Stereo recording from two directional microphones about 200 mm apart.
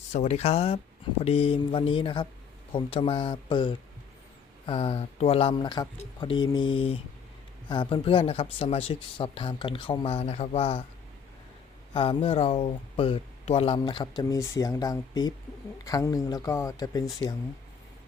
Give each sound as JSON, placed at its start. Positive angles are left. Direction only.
{"t": 0.1, "sound": "speech", "side_deg": 35}
{"t": 11.9, "sound": "speech", "side_deg": 25}